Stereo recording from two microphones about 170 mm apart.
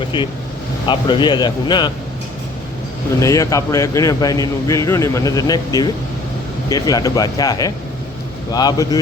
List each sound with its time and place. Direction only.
0.1 s a man's voice: 25° left (ahead or behind)
3.2 s a man's voice: 20° left (ahead or behind)